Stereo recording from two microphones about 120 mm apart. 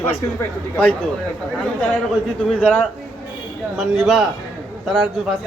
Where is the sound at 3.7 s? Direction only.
Centre (ahead or behind).